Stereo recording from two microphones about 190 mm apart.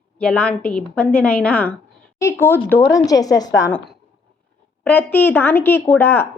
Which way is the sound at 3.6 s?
10° left (ahead or behind).